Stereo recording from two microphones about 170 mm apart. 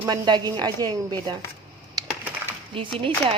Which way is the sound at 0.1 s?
25° right (ahead or behind).